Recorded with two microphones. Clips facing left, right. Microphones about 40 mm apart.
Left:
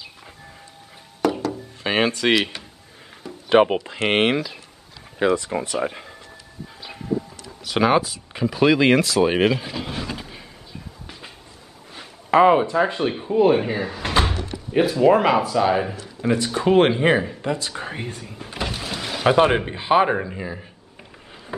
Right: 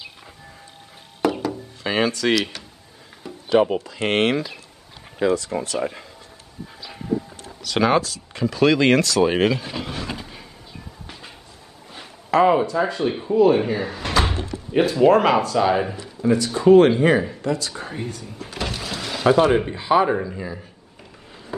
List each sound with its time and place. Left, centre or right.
1.2 s music: centre
1.8 s a man's voice: left
3.4 s speech: left
4.1 s a man's voice: centre
6.9 s a sound: centre
7.6 s a man's voice: centre
10.1 s vehicle: centre
12.3 s a man's voice: left
13.5 s a man's voice: centre
16.2 s a man's voice: left
18.4 s power windows: centre
19.3 s a man's voice: left